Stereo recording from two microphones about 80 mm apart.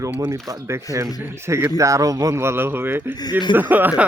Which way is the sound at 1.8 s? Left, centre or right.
Right.